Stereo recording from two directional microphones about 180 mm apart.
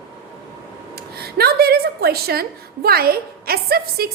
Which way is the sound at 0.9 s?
60° right (ahead or behind).